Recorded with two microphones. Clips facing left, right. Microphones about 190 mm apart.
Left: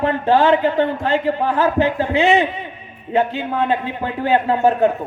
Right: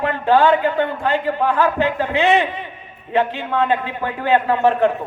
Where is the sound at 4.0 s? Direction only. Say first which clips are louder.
Even; 25° left (ahead or behind).